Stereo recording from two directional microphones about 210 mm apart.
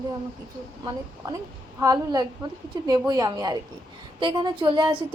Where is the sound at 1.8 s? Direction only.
20° right (ahead or behind).